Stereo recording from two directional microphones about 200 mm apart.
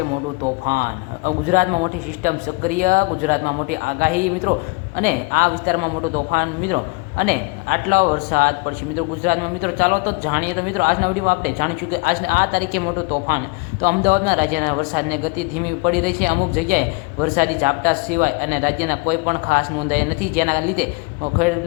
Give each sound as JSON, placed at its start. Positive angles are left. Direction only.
{"t": 0.6, "sound": "a man's voice", "side_deg": -45}